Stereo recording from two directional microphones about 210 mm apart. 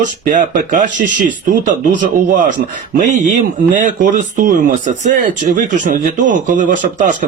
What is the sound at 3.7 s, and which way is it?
Speech, 40° right (ahead or behind).